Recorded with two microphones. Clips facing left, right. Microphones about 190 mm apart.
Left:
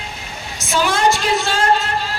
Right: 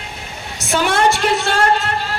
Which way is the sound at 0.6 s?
60° right (ahead or behind).